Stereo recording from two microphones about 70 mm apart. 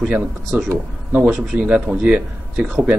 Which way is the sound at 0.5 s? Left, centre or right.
Right.